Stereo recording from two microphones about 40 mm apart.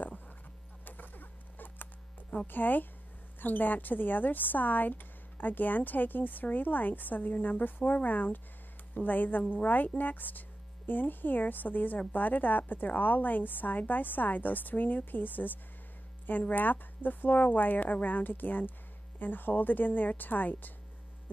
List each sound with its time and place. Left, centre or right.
0.8 s rodents: left
2.4 s speech: left